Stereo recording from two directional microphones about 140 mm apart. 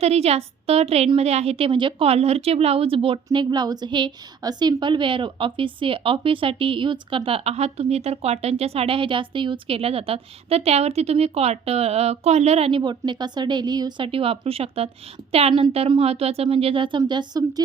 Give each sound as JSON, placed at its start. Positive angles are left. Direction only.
{"t": 0.0, "sound": "a woman's voice", "side_deg": -50}
{"t": 3.3, "sound": "a woman's voice", "side_deg": -30}